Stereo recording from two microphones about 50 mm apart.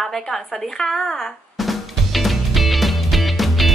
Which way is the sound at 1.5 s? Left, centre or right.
Centre.